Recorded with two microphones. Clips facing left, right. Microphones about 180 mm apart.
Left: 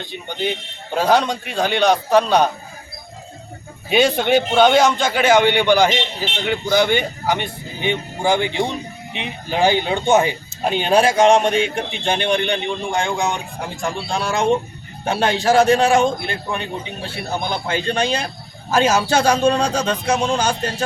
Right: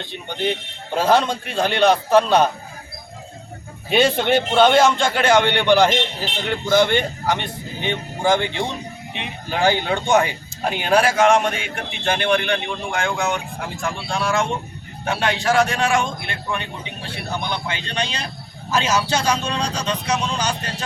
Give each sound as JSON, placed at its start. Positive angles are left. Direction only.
{"t": 0.9, "sound": "a man's voice", "side_deg": 0}
{"t": 3.8, "sound": "a man's voice", "side_deg": 0}